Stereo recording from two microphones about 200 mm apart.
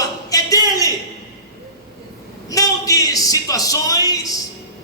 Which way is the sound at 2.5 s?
15° left (ahead or behind).